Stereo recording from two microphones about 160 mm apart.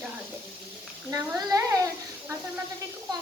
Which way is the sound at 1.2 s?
20° right (ahead or behind).